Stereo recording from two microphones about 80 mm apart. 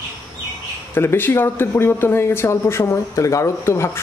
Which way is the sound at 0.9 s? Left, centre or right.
Left.